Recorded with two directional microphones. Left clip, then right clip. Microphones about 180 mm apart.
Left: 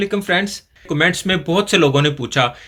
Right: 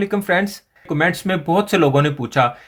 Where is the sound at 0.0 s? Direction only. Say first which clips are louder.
Even; 30° right (ahead or behind).